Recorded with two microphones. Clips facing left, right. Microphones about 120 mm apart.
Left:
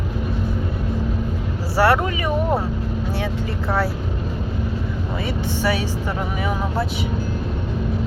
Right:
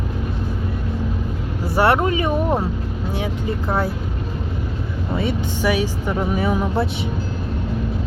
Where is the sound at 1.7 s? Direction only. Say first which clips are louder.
Right 1 dB; 25° right (ahead or behind).